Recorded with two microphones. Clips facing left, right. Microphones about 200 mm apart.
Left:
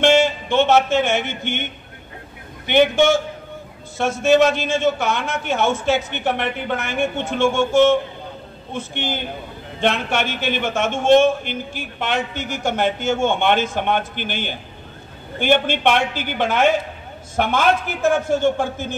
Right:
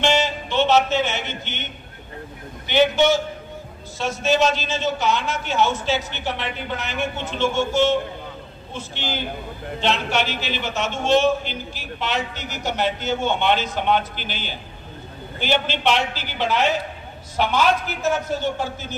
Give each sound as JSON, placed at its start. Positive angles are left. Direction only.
{"t": 0.0, "sound": "music", "side_deg": 55}
{"t": 2.6, "sound": "a man's voice", "side_deg": 55}